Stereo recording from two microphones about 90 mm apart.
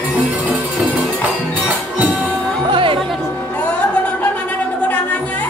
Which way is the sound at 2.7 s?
75° right (ahead or behind).